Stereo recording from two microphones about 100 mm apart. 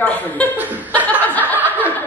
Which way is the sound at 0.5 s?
15° right (ahead or behind).